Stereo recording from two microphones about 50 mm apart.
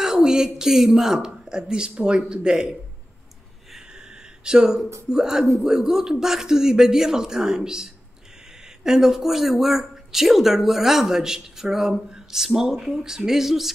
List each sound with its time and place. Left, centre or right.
0.0 s speech: centre
4.5 s speech: centre